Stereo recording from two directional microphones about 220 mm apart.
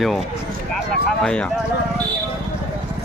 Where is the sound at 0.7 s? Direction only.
5° left (ahead or behind).